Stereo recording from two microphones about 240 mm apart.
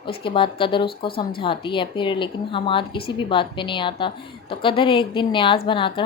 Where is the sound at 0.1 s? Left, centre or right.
Left.